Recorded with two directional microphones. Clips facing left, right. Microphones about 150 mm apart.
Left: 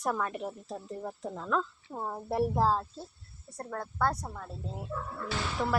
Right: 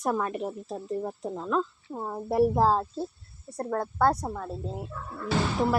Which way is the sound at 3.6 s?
40° right (ahead or behind).